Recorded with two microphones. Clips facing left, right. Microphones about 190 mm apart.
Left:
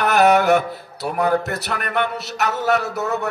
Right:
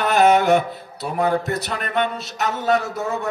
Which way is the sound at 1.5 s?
70° left (ahead or behind).